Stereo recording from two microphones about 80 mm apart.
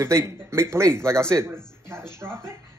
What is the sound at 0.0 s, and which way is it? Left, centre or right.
Speech, right.